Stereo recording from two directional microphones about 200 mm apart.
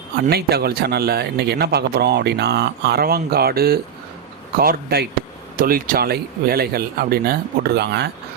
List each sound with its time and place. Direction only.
0.2 s speech: 50° right (ahead or behind)